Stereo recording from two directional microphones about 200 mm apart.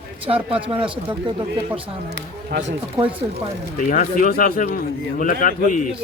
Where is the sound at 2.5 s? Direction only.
60° right (ahead or behind).